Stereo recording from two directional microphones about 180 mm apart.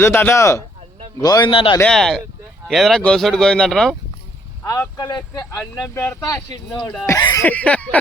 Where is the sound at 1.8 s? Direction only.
5° left (ahead or behind).